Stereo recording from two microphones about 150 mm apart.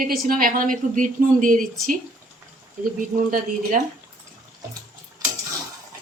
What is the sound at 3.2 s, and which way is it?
Speech, 60° right (ahead or behind).